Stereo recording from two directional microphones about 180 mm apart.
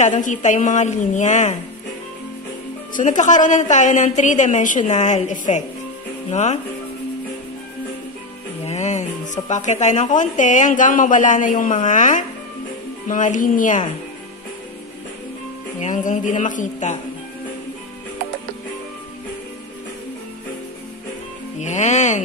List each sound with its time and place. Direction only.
0.0 s a woman's voice: 45° left (ahead or behind)
2.9 s a woman's voice: 45° left (ahead or behind)
8.6 s a woman's voice: 40° left (ahead or behind)
15.8 s a woman's voice: 45° left (ahead or behind)
21.5 s music: 40° left (ahead or behind)